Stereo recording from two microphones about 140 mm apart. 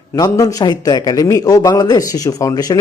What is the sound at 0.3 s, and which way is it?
A man's voice, 25° left (ahead or behind).